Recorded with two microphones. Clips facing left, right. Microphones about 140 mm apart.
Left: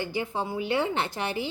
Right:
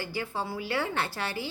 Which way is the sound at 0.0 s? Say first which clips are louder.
Left 3 dB; 20° left (ahead or behind).